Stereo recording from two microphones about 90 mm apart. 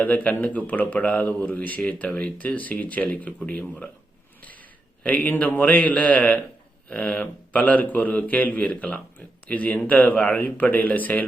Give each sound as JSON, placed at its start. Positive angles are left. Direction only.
{"t": 0.0, "sound": "speech", "side_deg": 15}
{"t": 5.0, "sound": "speech", "side_deg": 15}